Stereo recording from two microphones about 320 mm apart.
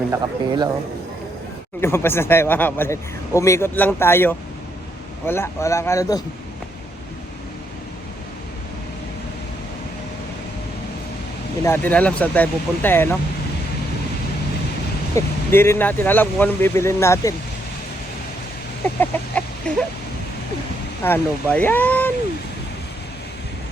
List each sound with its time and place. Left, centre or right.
0.1 s speech: centre
1.8 s speech: centre
11.6 s speech: centre
15.1 s speech: centre
18.9 s speech: centre
21.0 s speech: centre